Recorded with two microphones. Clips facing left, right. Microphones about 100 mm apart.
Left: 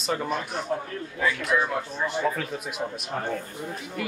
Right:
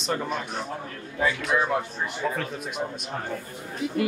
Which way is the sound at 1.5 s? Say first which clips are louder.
Even; 25° right (ahead or behind).